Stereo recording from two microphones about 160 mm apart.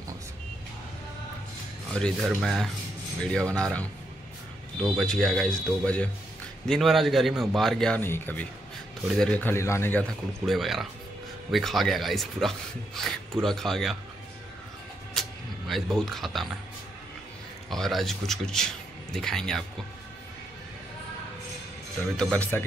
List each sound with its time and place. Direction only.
1.9 s speech: 5° left (ahead or behind)
4.9 s speech: 5° left (ahead or behind)
15.1 s a sound: centre (ahead or behind)
17.6 s speech: centre (ahead or behind)
22.1 s speech: 5° left (ahead or behind)